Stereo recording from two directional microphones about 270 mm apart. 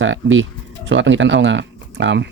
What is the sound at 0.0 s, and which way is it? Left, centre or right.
Speech, right.